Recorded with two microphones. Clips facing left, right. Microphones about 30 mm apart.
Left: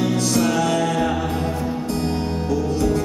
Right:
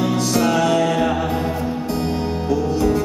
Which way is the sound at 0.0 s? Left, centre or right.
Centre.